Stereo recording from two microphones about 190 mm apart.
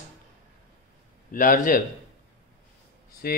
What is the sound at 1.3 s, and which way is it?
Speech, 45° left (ahead or behind).